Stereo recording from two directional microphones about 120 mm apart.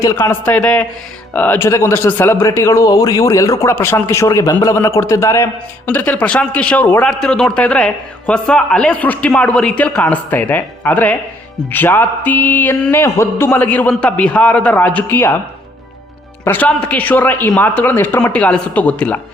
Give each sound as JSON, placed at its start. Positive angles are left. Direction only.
{"t": 0.0, "sound": "a man's voice", "side_deg": 30}
{"t": 0.3, "sound": "a man's voice", "side_deg": 15}
{"t": 16.4, "sound": "a man's voice", "side_deg": 15}